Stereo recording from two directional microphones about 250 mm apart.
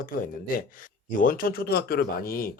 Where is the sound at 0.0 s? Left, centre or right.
Left.